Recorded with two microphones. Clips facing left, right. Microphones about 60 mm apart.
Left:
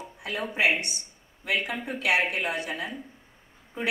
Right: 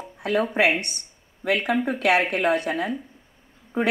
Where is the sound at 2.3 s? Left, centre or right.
Right.